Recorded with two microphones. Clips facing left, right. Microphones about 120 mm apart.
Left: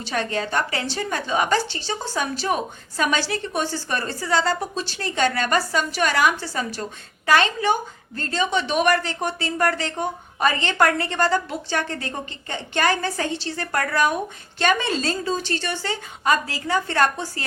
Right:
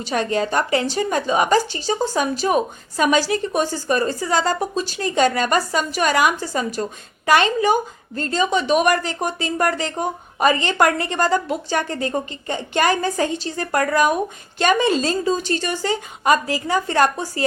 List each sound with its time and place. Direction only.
0.0 s a woman's voice: 15° right (ahead or behind)